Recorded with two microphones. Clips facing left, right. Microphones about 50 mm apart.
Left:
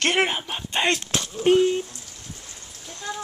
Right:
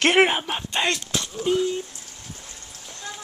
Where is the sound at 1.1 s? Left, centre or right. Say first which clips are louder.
Left 1 dB; left.